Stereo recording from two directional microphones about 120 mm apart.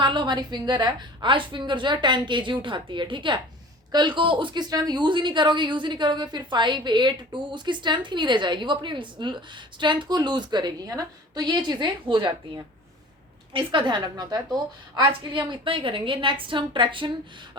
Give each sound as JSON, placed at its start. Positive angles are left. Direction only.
{"t": 0.0, "sound": "a woman's voice", "side_deg": -40}